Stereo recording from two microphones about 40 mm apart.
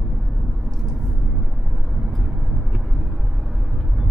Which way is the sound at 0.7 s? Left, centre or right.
Centre.